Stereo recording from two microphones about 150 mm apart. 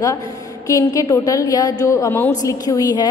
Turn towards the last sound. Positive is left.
turn(degrees=25)  # may be behind; listen again after turning